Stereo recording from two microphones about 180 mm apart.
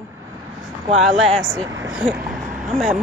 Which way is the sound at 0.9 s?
Centre (ahead or behind).